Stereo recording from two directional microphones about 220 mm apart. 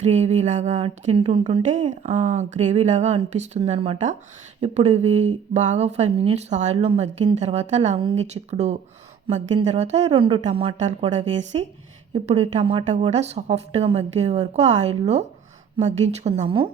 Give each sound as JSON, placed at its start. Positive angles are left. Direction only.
{"t": 0.0, "sound": "speech", "side_deg": -30}